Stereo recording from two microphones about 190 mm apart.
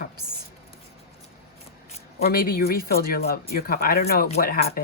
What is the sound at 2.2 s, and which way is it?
Speech, 50° left (ahead or behind).